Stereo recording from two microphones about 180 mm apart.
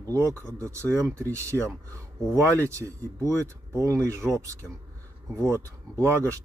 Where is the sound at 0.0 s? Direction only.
15° right (ahead or behind).